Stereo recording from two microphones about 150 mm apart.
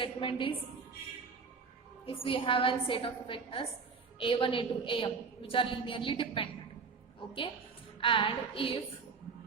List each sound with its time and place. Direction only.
0.0 s a woman's voice: 35° left (ahead or behind)
2.0 s a woman's voice: 35° left (ahead or behind)
8.0 s a woman's voice: 35° left (ahead or behind)